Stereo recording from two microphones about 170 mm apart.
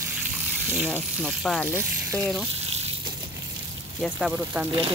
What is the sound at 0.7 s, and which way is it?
Speech, 10° right (ahead or behind).